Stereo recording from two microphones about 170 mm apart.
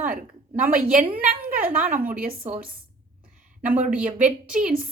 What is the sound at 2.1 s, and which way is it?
Speech, 55° right (ahead or behind).